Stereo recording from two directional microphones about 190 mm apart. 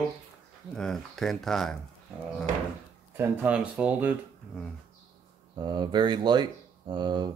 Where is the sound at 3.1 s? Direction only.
10° right (ahead or behind).